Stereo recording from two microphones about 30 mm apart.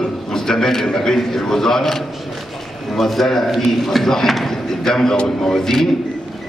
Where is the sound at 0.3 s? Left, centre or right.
Centre.